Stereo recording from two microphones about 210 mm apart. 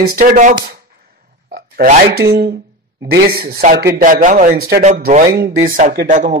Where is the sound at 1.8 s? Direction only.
50° right (ahead or behind).